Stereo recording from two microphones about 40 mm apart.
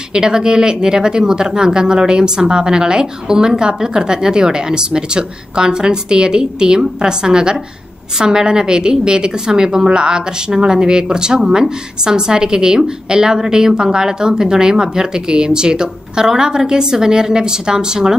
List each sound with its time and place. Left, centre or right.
0.1 s a woman's voice: centre